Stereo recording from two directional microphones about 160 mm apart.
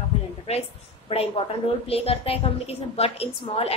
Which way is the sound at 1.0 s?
35° left (ahead or behind).